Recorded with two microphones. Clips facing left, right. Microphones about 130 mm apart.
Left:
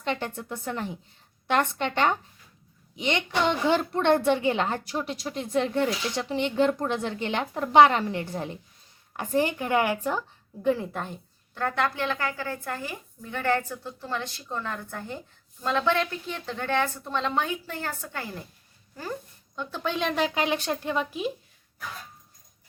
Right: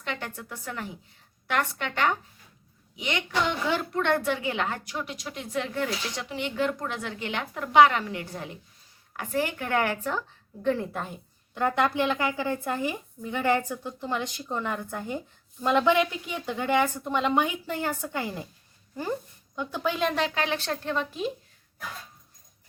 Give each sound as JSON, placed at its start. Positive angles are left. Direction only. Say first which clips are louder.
{"t": 0.0, "sound": "a woman's voice", "louder": "left 5 dB", "side_deg": 30}
{"t": 11.5, "sound": "speech", "louder": "right 3 dB", "side_deg": -15}
{"t": 19.5, "sound": "speech", "louder": "right 1 dB", "side_deg": -10}
{"t": 20.3, "sound": "speech", "louder": "left 2 dB", "side_deg": 15}